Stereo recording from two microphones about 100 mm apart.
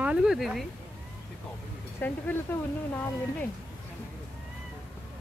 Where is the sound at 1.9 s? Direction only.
20° left (ahead or behind).